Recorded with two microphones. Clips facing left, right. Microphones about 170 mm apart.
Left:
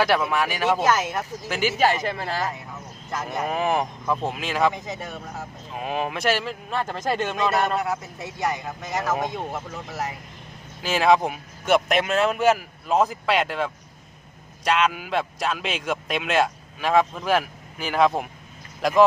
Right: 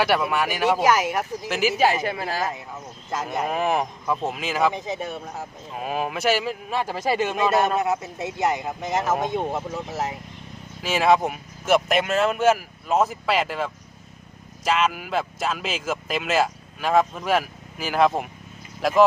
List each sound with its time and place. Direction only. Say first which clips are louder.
0.0 s speech: even; centre (ahead or behind)
0.7 s speech: right 2 dB; 10° right (ahead or behind)
4.7 s speech: right 4 dB; 20° right (ahead or behind)
5.7 s speech: even; centre (ahead or behind)
7.8 s speech: right 3 dB; 20° right (ahead or behind)
10.8 s speech: even; centre (ahead or behind)